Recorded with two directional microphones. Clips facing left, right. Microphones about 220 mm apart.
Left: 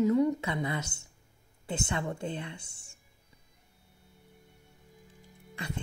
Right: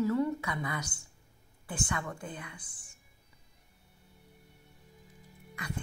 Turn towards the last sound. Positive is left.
turn(degrees=25)  # may be behind; listen again after turning